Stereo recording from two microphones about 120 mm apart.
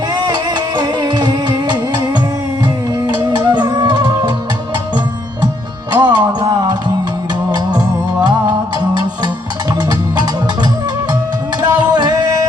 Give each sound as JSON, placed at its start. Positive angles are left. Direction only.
{"t": 0.1, "sound": "music", "side_deg": -40}
{"t": 5.9, "sound": "music", "side_deg": -40}
{"t": 9.7, "sound": "music", "side_deg": -35}